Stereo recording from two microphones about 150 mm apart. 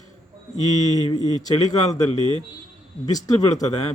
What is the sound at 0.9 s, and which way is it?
Speech, 25° left (ahead or behind).